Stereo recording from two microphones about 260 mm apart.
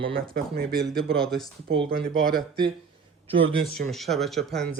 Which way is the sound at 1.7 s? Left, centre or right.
Centre.